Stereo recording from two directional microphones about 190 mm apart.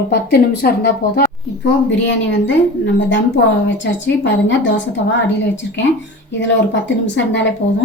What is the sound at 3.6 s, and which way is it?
A woman's voice, 70° left (ahead or behind).